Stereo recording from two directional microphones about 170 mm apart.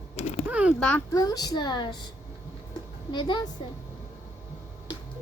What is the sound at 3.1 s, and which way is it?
Speech, 25° left (ahead or behind).